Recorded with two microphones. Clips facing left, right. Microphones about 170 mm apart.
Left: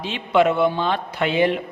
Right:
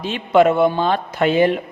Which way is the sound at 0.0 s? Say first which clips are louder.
Right 4 dB; 45° right (ahead or behind).